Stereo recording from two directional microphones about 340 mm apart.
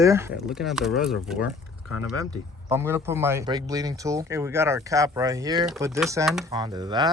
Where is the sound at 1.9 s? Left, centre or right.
Left.